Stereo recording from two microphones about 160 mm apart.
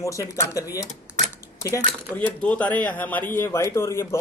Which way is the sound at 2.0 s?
10° left (ahead or behind).